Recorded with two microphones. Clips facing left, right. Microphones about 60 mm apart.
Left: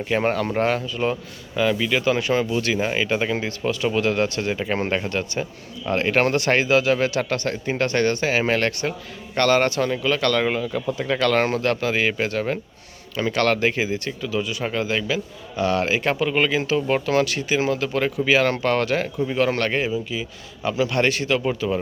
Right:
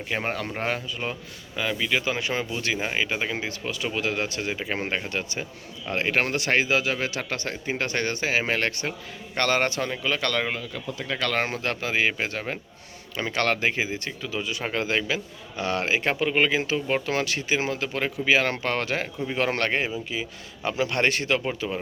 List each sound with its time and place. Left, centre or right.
0.1 s a man's voice: centre
1.5 s a man's voice: centre
2.0 s a man's voice: centre
2.7 s a man's voice: centre
10.6 s speech: left
11.2 s a man's voice: centre
16.7 s a man's voice: centre
17.1 s a man's voice: right